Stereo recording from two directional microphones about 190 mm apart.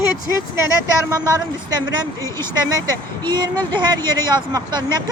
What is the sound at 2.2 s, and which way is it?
Speech, 15° left (ahead or behind).